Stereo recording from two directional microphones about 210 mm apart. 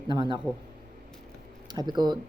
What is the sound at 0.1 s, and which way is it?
Speech, 20° right (ahead or behind).